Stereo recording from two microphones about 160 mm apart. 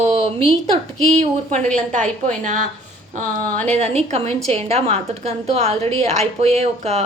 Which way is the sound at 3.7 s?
40° right (ahead or behind).